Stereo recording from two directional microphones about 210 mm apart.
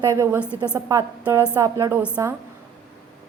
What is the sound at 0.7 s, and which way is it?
A woman's voice, 15° right (ahead or behind).